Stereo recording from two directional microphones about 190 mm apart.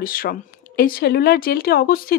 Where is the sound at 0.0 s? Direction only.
50° left (ahead or behind).